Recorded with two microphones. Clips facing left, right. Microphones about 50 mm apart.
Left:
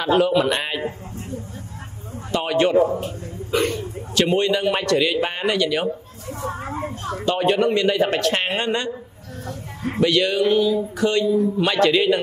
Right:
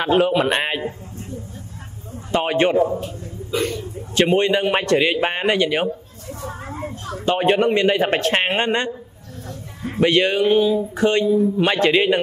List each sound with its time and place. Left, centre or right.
0.0 s speech: right
2.3 s speech: right
4.1 s speech: right
7.2 s speech: right
9.9 s speech: right